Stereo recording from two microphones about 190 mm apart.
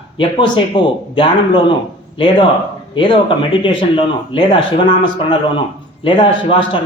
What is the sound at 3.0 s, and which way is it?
Speech, 25° left (ahead or behind).